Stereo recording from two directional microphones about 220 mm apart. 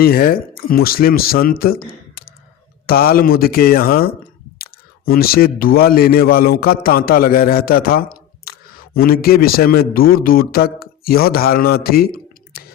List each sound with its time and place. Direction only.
0.0 s speech: 45° left (ahead or behind)